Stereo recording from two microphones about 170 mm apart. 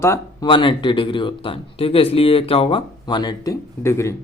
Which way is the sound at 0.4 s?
30° left (ahead or behind).